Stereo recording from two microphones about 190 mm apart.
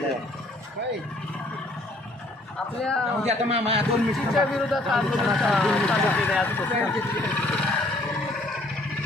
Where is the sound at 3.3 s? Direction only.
35° right (ahead or behind).